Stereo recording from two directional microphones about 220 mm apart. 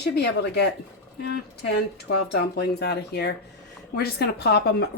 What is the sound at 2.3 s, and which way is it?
A woman's voice, 45° left (ahead or behind).